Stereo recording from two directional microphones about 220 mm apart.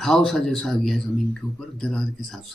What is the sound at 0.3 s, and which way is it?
Speech, centre (ahead or behind).